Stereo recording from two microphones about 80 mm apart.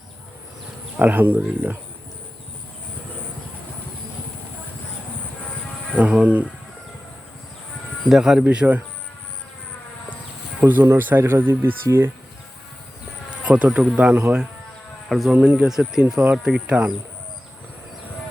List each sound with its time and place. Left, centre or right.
0.9 s speech: right
5.9 s speech: centre
8.1 s speech: centre
10.6 s speech: right
13.4 s speech: centre